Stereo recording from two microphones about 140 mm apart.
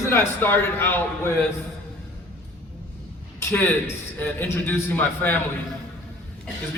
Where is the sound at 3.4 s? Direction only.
15° left (ahead or behind).